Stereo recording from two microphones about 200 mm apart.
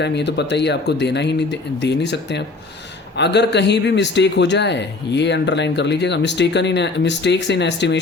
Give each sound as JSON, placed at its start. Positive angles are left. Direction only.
{"t": 0.0, "sound": "a man's voice", "side_deg": 60}